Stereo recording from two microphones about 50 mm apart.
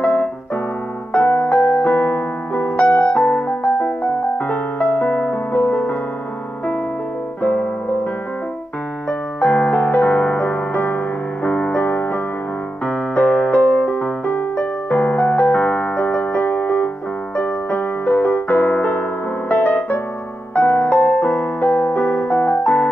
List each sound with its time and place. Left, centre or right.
0.0 s keyboard: left
1.5 s music: left
1.9 s piano: left
2.8 s keyboard: left
3.2 s piano: left
4.5 s music: left
9.4 s music: left
12.8 s keyboard: left
13.6 s music: centre
14.2 s piano: left
17.4 s keyboard: left
19.5 s music: left